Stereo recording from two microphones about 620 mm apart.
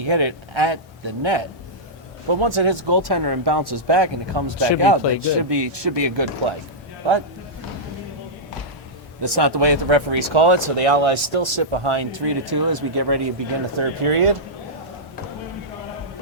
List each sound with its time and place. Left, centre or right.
0.0 s speech: right
9.2 s speech: right
13.7 s speech: right